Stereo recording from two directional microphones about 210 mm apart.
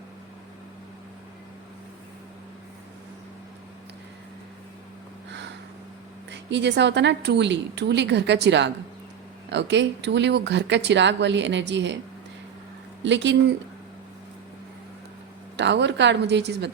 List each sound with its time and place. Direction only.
6.3 s speech: 55° right (ahead or behind)
13.0 s speech: 60° right (ahead or behind)
15.5 s speech: 55° right (ahead or behind)